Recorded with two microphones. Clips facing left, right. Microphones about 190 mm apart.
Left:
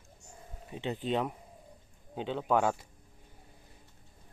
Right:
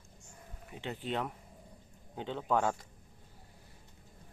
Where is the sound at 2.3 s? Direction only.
5° left (ahead or behind).